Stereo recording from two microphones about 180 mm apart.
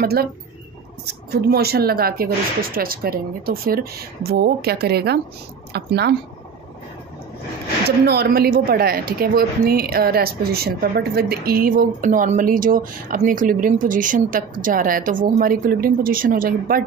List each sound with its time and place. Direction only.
0.0 s speech: 60° right (ahead or behind)
8.1 s a woman's voice: 60° right (ahead or behind)